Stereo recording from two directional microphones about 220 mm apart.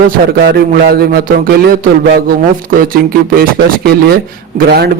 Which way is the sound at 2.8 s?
40° right (ahead or behind).